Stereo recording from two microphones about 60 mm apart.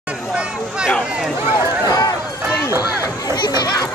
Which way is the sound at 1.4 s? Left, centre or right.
Right.